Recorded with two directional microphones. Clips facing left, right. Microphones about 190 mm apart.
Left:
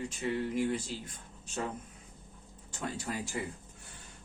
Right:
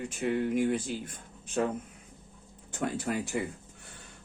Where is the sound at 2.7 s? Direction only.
55° right (ahead or behind).